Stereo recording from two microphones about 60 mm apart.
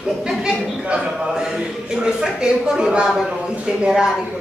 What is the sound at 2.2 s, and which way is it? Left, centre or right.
Speech, centre.